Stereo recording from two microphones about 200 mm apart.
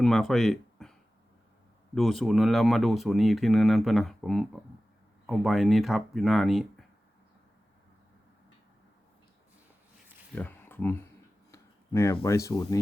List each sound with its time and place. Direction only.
0.0 s speech: centre (ahead or behind)
2.0 s speech: centre (ahead or behind)
10.3 s speech: 10° left (ahead or behind)
11.5 s a sound: 15° left (ahead or behind)
12.1 s speech: 15° left (ahead or behind)